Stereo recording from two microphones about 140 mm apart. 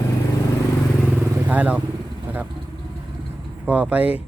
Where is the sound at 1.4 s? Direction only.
10° right (ahead or behind).